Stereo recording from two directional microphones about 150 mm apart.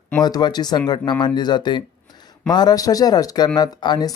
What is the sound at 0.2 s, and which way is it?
Speech, 25° left (ahead or behind).